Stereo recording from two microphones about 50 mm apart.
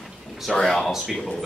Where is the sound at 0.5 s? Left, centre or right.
Centre.